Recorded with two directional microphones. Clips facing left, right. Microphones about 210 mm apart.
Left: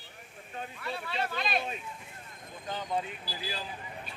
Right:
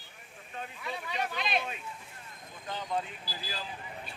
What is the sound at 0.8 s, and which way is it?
Speech, 15° right (ahead or behind).